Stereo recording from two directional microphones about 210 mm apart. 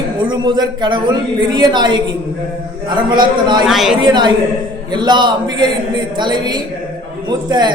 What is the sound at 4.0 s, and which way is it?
A man's voice, 20° right (ahead or behind).